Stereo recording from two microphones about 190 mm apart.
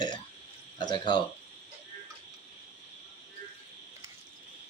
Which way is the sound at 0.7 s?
25° left (ahead or behind).